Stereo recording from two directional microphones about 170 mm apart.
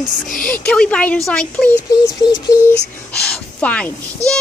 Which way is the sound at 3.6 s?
5° left (ahead or behind).